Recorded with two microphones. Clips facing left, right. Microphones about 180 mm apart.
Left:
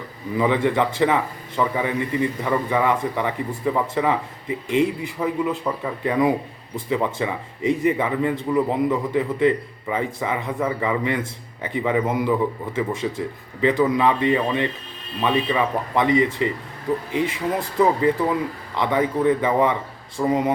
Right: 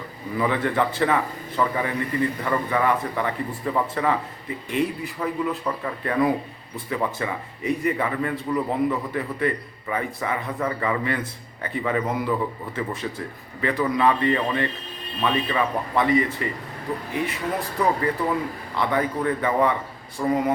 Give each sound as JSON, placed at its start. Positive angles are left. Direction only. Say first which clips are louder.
{"t": 0.3, "sound": "a man's voice", "louder": "left 3 dB", "side_deg": 20}